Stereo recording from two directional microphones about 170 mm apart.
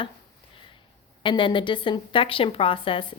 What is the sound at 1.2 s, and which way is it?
A woman's voice, 30° left (ahead or behind).